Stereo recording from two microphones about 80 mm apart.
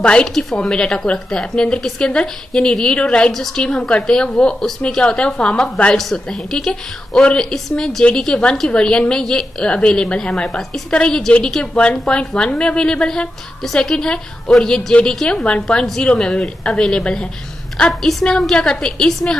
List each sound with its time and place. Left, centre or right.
0.0 s a woman's voice: centre